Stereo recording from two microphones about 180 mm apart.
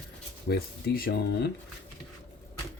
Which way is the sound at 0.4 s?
60° left (ahead or behind).